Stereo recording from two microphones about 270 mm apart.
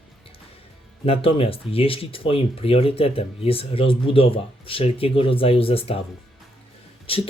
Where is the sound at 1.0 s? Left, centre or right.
Left.